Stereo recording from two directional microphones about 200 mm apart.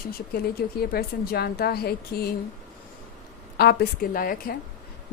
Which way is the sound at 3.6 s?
55° left (ahead or behind).